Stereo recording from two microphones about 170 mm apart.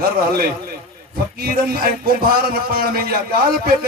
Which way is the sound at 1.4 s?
60° right (ahead or behind).